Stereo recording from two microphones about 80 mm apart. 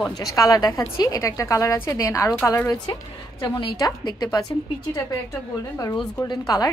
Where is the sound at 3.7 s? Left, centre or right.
Left.